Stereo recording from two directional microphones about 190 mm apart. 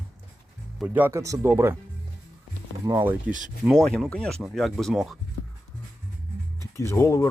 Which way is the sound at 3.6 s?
5° left (ahead or behind).